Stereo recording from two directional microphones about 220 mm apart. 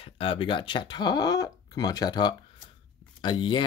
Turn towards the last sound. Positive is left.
turn(degrees=20)  # may be behind; listen again after turning